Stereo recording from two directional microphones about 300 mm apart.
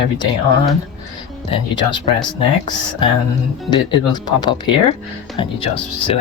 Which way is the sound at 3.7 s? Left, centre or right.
Centre.